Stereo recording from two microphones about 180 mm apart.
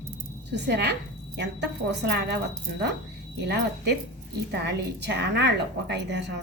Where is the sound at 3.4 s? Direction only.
70° right (ahead or behind).